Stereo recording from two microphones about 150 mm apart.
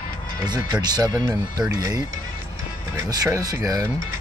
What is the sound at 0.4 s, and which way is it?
Speech, 25° right (ahead or behind).